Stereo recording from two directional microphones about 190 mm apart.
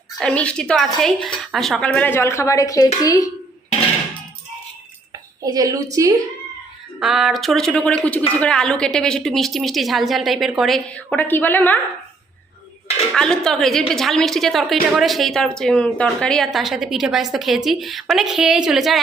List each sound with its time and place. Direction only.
0.2 s a woman's voice: 5° left (ahead or behind)
5.4 s a woman's voice: 20° right (ahead or behind)
7.0 s a woman's voice: centre (ahead or behind)
13.1 s a woman's voice: 5° left (ahead or behind)